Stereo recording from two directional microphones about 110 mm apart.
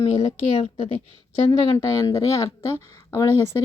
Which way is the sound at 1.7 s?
35° left (ahead or behind).